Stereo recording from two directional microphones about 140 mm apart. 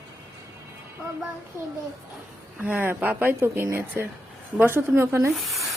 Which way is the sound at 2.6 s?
15° right (ahead or behind).